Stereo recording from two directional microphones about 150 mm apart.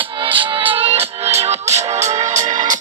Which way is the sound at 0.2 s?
35° right (ahead or behind).